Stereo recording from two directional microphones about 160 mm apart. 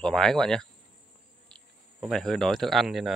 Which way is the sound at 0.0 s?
5° left (ahead or behind).